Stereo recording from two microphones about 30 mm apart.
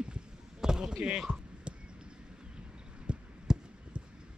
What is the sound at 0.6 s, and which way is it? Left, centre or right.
Speech, right.